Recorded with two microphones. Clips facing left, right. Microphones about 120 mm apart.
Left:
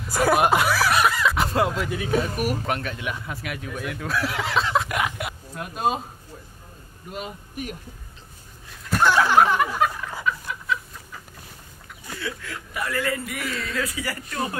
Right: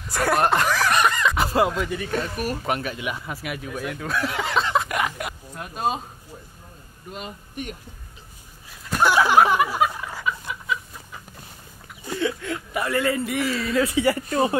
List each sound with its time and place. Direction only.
0.0 s speech: centre (ahead or behind)
2.6 s speech: 5° right (ahead or behind)
5.1 s a sound: centre (ahead or behind)
7.1 s speech: 5° left (ahead or behind)
8.6 s a sound: 5° right (ahead or behind)
10.2 s chicken: 5° right (ahead or behind)
12.2 s speech: 25° right (ahead or behind)